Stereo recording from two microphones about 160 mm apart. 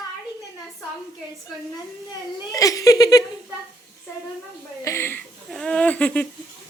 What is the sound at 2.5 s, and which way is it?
Speech, 20° left (ahead or behind).